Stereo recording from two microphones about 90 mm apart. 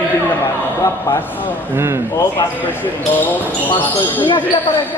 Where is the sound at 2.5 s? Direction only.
20° left (ahead or behind).